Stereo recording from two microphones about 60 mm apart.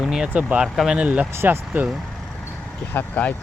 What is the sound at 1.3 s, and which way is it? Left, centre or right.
Speech, right.